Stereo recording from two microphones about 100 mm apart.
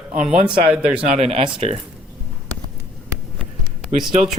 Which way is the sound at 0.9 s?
70° right (ahead or behind).